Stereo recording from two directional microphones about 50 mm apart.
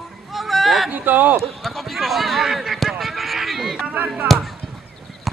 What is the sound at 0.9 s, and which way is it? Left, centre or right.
Speech, right.